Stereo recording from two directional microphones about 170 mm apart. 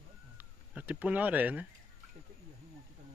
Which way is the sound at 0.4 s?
10° right (ahead or behind).